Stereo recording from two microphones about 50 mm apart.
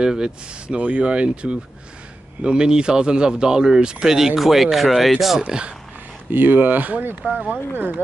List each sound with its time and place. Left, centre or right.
0.0 s speech: centre
0.7 s speech: right; by 5.4 s centre
5.4 s speech: right
6.3 s speech: right